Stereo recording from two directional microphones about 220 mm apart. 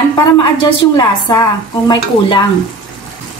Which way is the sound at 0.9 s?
20° left (ahead or behind).